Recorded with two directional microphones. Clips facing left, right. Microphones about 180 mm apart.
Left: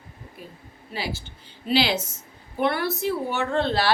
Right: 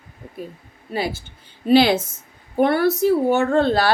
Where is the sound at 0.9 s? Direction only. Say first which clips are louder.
Right 7 dB; 50° right (ahead or behind).